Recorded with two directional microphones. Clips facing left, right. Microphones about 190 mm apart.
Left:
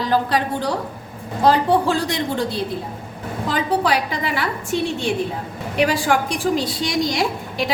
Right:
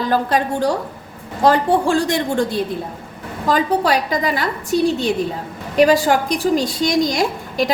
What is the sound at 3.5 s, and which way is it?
A woman's voice, 45° right (ahead or behind).